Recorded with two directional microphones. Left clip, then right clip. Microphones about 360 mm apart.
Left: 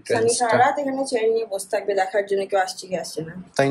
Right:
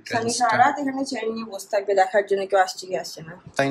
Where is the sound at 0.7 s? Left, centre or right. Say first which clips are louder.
Left 4 dB; right.